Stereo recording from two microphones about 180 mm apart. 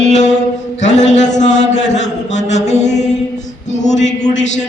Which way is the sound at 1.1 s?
40° left (ahead or behind).